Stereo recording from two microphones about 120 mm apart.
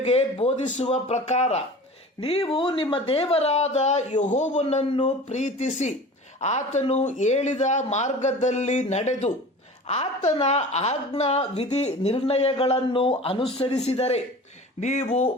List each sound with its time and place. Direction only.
0.0 s a man's voice: 60° left (ahead or behind)
2.2 s a woman's voice: 55° left (ahead or behind); by 4.6 s 80° left
4.7 s a man's voice: 65° left (ahead or behind)
5.3 s a man's voice: 75° left (ahead or behind); by 14.2 s 60° left (ahead or behind)
14.8 s a man's voice: 75° left (ahead or behind)
15.0 s a woman's voice: 55° left (ahead or behind)